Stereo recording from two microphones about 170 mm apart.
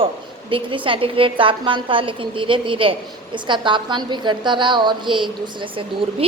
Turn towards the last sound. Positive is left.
turn(degrees=-30)  # may be behind; listen again after turning